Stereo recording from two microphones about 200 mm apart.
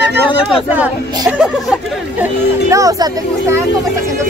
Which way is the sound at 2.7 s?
15° right (ahead or behind).